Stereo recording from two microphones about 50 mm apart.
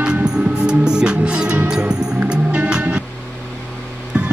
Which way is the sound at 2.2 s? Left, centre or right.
Right.